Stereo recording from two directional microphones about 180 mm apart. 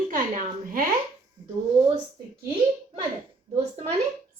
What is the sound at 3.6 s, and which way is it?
Speech, 35° right (ahead or behind).